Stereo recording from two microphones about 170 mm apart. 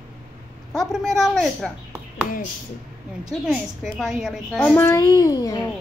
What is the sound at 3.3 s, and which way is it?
A woman's voice, centre (ahead or behind).